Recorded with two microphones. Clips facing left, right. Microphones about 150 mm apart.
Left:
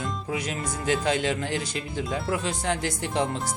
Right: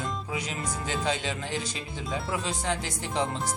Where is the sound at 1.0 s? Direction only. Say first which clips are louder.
Left 5 dB; 55° left (ahead or behind).